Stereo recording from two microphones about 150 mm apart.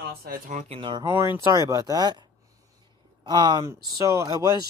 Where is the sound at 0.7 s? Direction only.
30° right (ahead or behind).